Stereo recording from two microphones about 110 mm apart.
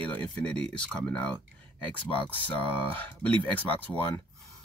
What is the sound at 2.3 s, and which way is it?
Speech, 15° left (ahead or behind).